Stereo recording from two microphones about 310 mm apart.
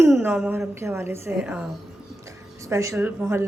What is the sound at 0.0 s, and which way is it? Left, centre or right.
Speech, centre.